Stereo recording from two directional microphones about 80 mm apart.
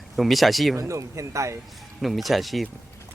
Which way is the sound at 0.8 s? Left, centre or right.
Right.